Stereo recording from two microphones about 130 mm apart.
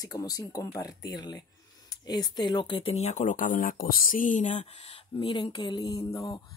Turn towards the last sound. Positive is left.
turn(degrees=25)  # may be behind; listen again after turning